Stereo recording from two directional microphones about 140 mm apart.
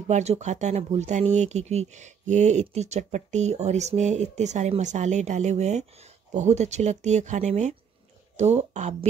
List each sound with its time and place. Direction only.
0.1 s speech: 55° right (ahead or behind)